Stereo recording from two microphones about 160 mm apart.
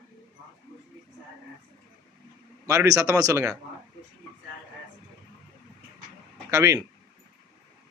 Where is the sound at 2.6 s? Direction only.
20° right (ahead or behind).